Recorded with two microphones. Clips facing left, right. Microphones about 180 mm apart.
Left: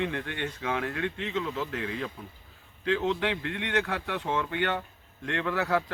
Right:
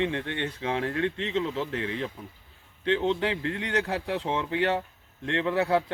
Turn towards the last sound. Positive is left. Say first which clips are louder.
# right 3 dB
turn(degrees=-25)  # may be behind; listen again after turning